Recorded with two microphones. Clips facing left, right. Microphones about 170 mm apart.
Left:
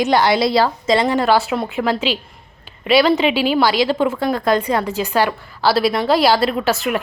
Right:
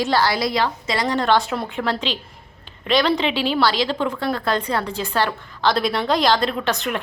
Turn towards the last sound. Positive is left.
turn(degrees=5)  # may be behind; listen again after turning